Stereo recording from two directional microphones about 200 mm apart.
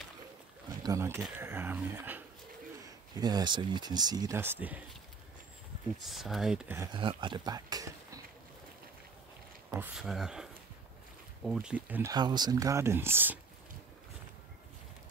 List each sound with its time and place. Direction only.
0.8 s speech: 15° right (ahead or behind)
6.0 s speech: centre (ahead or behind)
6.9 s speech: 25° right (ahead or behind)
9.8 s speech: centre (ahead or behind)
11.5 s speech: 10° right (ahead or behind)